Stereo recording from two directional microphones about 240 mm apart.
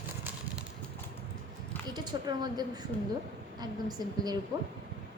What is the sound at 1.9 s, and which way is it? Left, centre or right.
A woman's voice, centre.